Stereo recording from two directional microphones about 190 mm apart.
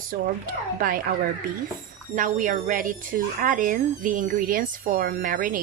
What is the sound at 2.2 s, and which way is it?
A woman's voice, 45° right (ahead or behind).